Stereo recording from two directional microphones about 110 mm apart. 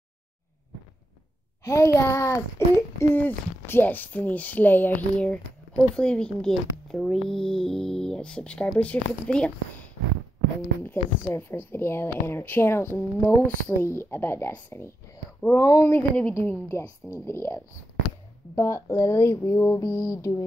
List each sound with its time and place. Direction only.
1.6 s a child's voice: 25° left (ahead or behind); by 9.5 s 10° left (ahead or behind)
10.8 s speech: 20° left (ahead or behind)